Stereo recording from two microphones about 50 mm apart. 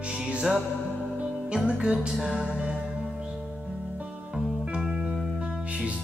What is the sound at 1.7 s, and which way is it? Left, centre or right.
Music, right.